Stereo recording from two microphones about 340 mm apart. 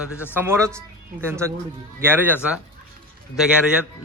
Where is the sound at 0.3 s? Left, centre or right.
Centre.